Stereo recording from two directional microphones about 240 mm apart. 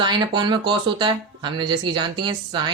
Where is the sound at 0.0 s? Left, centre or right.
Centre.